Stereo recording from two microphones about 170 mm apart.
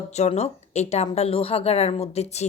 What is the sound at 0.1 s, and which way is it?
A woman's voice, 40° left (ahead or behind).